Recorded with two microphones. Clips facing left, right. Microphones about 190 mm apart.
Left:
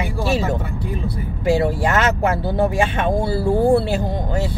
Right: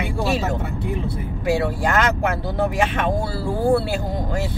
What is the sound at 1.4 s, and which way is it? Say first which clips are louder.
Speech: left 3 dB; 25° left (ahead or behind).